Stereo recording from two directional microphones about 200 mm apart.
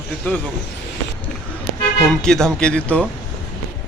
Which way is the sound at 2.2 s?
5° left (ahead or behind).